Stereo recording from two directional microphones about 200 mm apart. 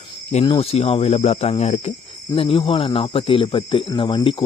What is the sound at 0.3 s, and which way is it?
Speech, 30° left (ahead or behind).